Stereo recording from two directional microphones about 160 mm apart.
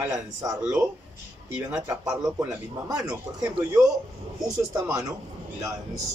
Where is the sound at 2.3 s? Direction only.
20° right (ahead or behind).